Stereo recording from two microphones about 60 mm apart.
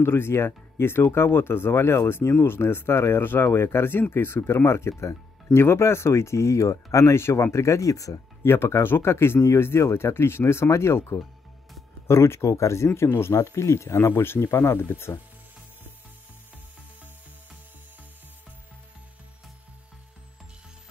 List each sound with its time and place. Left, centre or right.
0.0 s speech: left
8.5 s speech: left